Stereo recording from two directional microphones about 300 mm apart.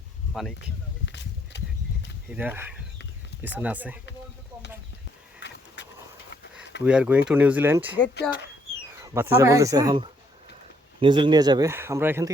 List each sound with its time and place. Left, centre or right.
0.6 s a sound: left
2.3 s speech: centre
5.4 s a sound: left
6.8 s speech: centre
8.1 s speech: left
9.4 s speech: centre